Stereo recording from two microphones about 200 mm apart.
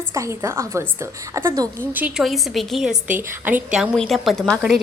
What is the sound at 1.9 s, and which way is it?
A woman's voice, 5° right (ahead or behind).